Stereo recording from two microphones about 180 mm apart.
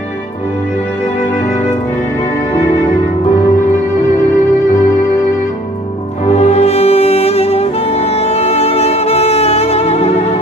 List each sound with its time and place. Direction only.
6.3 s music: 35° left (ahead or behind)